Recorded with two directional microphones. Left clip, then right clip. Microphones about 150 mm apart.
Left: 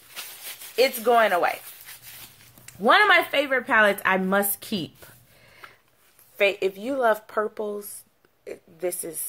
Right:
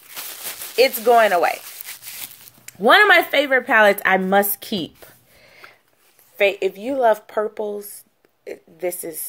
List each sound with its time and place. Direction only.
0.7 s speech: 40° right (ahead or behind)
2.6 s speech: 35° right (ahead or behind)